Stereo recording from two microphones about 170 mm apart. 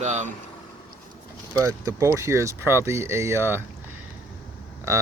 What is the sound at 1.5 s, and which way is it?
Speech, 20° right (ahead or behind).